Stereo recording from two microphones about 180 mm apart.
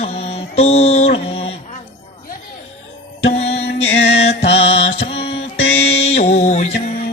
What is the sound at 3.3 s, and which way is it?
Music, 35° left (ahead or behind).